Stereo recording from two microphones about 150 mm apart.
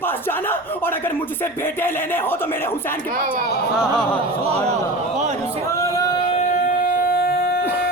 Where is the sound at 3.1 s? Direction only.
70° right (ahead or behind).